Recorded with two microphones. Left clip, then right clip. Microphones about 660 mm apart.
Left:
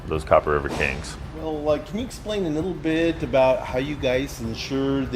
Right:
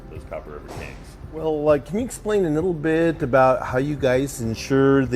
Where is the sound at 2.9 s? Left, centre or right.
Right.